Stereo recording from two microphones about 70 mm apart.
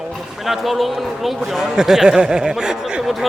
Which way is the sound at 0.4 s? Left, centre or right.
Centre.